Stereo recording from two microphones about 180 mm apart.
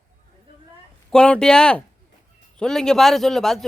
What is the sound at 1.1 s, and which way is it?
A man's voice, 5° left (ahead or behind).